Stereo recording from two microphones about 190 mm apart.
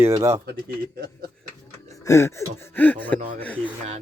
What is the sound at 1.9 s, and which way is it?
Speech, 15° left (ahead or behind).